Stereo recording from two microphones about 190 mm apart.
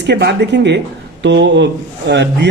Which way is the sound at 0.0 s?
65° right (ahead or behind).